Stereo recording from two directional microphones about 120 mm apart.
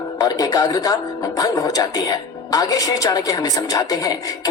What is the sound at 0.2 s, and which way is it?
Speech, 30° left (ahead or behind).